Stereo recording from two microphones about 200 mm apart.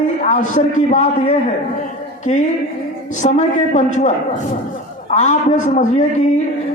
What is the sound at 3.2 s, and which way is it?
A man's voice, 35° left (ahead or behind).